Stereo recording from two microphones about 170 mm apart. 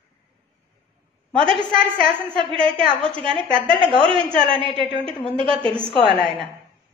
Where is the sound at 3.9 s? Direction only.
30° right (ahead or behind).